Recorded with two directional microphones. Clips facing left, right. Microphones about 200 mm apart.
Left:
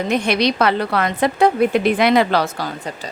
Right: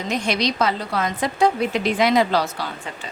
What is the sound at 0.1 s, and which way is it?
A woman's voice, 60° left (ahead or behind).